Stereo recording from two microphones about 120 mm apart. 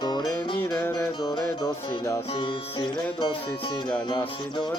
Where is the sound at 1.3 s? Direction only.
30° left (ahead or behind).